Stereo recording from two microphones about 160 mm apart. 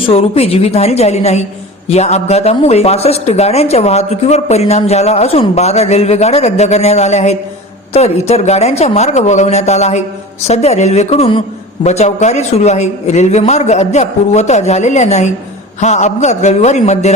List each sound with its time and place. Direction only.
0.1 s a man's voice: 40° left (ahead or behind)